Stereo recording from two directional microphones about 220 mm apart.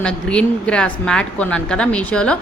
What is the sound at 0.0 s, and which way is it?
A woman's voice, 5° left (ahead or behind).